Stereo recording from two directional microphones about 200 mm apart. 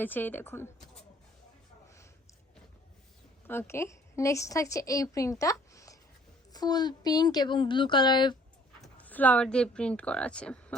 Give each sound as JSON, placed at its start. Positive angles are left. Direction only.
{"t": 0.0, "sound": "speech", "side_deg": 10}
{"t": 3.4, "sound": "a woman's voice", "side_deg": 10}
{"t": 8.8, "sound": "speech", "side_deg": 5}